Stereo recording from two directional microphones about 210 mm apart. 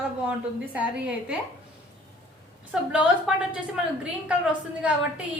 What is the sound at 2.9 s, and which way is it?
Speech, 5° right (ahead or behind).